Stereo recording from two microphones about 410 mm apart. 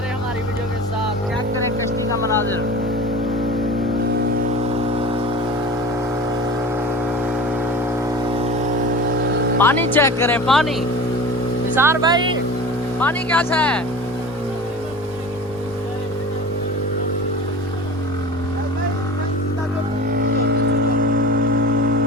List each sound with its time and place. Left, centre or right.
9.6 s speech: centre
20.1 s vehicle: right